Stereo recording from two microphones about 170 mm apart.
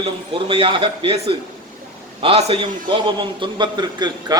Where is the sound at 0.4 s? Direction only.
30° right (ahead or behind).